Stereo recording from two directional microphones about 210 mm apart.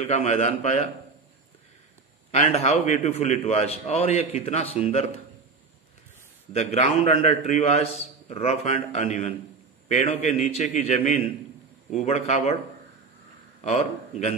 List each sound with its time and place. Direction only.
0.0 s a man's voice: 30° left (ahead or behind)
2.3 s a man's voice: 30° left (ahead or behind)
6.5 s a man's voice: 30° left (ahead or behind)
13.6 s speech: 30° left (ahead or behind)